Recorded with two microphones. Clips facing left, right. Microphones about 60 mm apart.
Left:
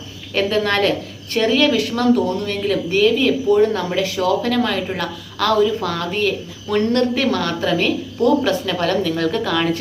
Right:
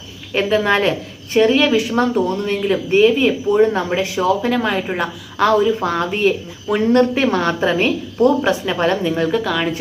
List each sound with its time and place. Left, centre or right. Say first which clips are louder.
0.3 s a woman's voice: right 2 dB; centre
2.6 s speech: right 1 dB; centre
2.9 s a woman's voice: right 3 dB; right
7.2 s a woman's voice: right 3 dB; right
9.3 s speech: even; centre